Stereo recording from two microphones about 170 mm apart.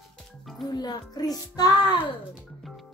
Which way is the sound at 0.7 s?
25° left (ahead or behind).